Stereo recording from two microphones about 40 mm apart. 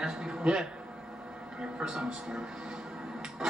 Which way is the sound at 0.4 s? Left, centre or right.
Right.